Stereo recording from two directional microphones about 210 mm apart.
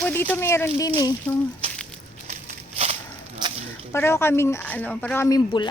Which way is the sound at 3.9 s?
10° left (ahead or behind).